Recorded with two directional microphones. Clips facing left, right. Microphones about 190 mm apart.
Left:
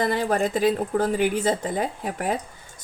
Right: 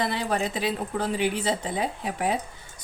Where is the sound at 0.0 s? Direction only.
45° left (ahead or behind).